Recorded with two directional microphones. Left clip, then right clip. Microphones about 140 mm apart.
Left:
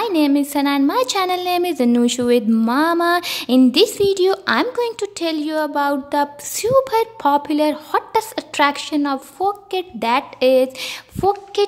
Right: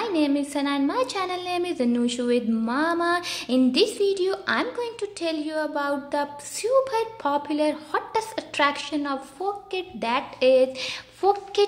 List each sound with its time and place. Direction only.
0.0 s a woman's voice: 45° left (ahead or behind)